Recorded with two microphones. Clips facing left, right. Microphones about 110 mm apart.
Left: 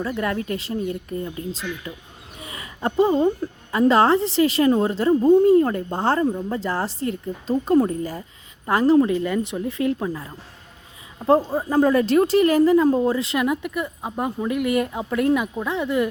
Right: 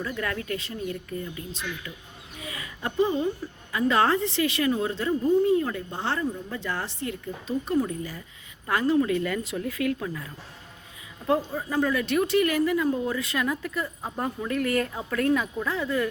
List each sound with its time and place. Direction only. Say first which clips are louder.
0.0 s a woman's voice: left 6 dB; 25° left (ahead or behind)
3.7 s a woman's voice: left 6 dB; 30° left (ahead or behind)
8.6 s a woman's voice: left 6 dB; 30° left (ahead or behind)
13.1 s speech: left 6 dB; 25° left (ahead or behind)